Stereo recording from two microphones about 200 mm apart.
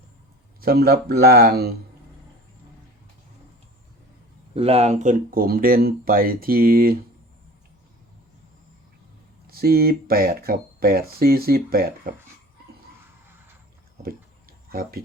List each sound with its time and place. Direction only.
0.6 s speech: 50° right (ahead or behind)
4.5 s speech: 30° right (ahead or behind); by 6.9 s 45° right (ahead or behind)
9.5 s speech: 50° right (ahead or behind)
14.7 s speech: 50° right (ahead or behind)